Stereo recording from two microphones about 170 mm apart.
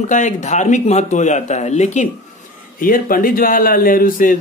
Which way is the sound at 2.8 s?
55° left (ahead or behind).